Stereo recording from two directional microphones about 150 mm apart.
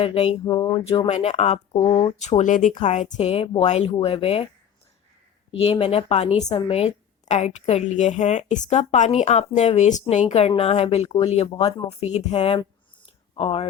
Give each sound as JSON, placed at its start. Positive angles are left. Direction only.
{"t": 0.0, "sound": "speech", "side_deg": 40}
{"t": 0.4, "sound": "speech", "side_deg": 25}
{"t": 0.9, "sound": "speech", "side_deg": 45}
{"t": 3.7, "sound": "speech", "side_deg": 50}
{"t": 5.5, "sound": "speech", "side_deg": 40}